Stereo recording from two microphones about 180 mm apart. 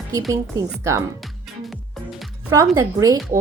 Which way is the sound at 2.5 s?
20° right (ahead or behind).